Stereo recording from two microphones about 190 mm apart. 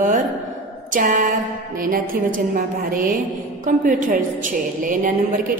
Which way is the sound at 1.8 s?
45° right (ahead or behind).